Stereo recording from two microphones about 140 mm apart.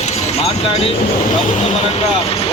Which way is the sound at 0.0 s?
50° left (ahead or behind).